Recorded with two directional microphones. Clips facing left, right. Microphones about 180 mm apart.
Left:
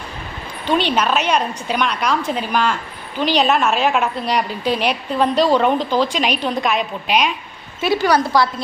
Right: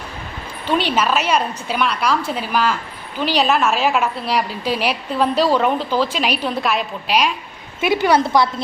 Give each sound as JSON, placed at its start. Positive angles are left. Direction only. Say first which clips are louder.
{"t": 0.7, "sound": "a woman's voice", "louder": "left 1 dB", "side_deg": -5}
{"t": 7.8, "sound": "a woman's voice", "louder": "right 1 dB", "side_deg": -20}